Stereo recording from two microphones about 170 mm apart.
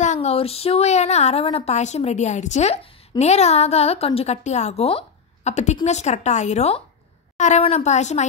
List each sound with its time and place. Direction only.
0.0 s a woman's voice: 40° left (ahead or behind)